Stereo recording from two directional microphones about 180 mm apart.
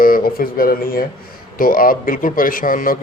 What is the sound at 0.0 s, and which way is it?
Speech, 55° left (ahead or behind).